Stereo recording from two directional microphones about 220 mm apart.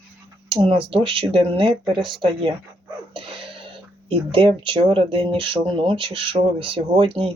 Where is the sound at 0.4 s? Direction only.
25° right (ahead or behind).